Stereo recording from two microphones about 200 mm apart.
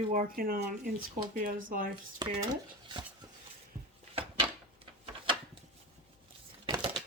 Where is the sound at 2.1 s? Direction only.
20° right (ahead or behind).